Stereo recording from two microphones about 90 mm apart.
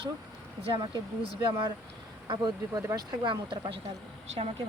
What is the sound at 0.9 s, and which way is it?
Speech, 60° right (ahead or behind).